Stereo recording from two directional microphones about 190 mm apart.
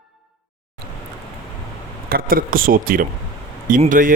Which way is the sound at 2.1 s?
50° right (ahead or behind).